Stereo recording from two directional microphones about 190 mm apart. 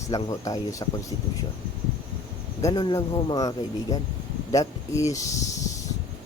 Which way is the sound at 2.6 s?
20° left (ahead or behind).